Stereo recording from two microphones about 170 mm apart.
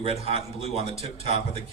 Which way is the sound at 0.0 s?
35° right (ahead or behind).